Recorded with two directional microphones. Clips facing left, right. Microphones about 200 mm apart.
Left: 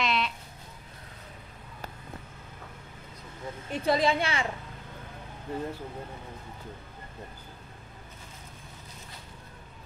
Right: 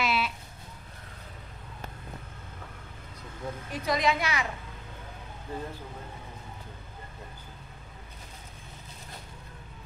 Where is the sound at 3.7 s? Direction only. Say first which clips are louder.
Left 3 dB; 30° left (ahead or behind).